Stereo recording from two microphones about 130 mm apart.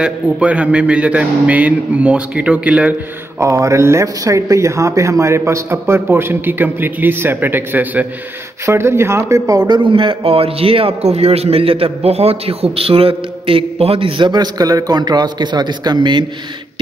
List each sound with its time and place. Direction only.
0.0 s a man's voice: 10° right (ahead or behind)
3.3 s speech: 25° right (ahead or behind)